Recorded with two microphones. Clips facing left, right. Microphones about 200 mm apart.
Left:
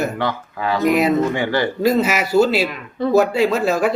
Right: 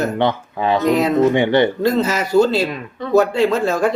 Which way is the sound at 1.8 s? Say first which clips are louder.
Even; 10° left (ahead or behind).